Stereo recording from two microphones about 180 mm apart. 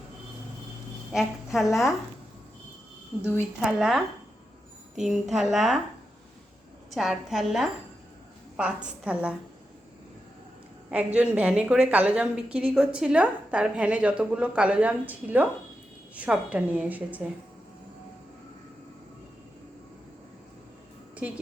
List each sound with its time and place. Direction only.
1.1 s speech: centre (ahead or behind)
3.6 s speech: 5° right (ahead or behind)
6.9 s a woman's voice: centre (ahead or behind)
10.9 s a woman's voice: 5° right (ahead or behind)
21.2 s a woman's voice: 5° right (ahead or behind)